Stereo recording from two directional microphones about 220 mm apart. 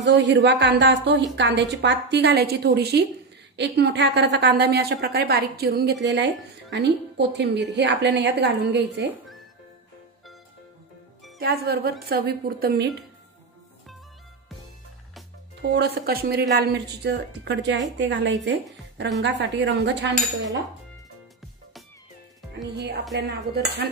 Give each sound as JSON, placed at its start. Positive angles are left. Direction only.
{"t": 0.0, "sound": "a woman's voice", "side_deg": -55}
{"t": 11.3, "sound": "a woman's voice", "side_deg": -45}
{"t": 15.7, "sound": "a woman's voice", "side_deg": -45}
{"t": 23.1, "sound": "a woman's voice", "side_deg": -45}